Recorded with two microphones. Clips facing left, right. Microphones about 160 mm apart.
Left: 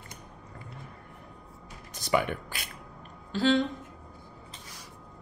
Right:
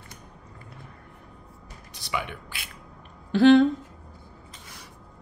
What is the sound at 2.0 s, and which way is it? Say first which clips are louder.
Speech: left 5 dB; 45° left (ahead or behind).